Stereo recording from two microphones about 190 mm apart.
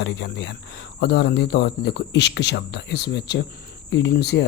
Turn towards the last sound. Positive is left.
turn(degrees=60)  # may be behind; listen again after turning